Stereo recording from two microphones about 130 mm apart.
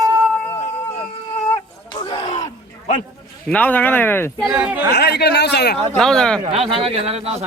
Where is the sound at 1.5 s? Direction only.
40° left (ahead or behind).